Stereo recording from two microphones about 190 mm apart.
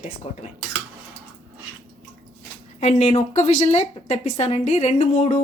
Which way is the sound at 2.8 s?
35° left (ahead or behind).